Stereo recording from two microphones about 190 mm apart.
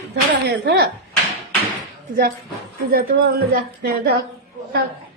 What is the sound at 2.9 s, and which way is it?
A woman's voice, 50° right (ahead or behind).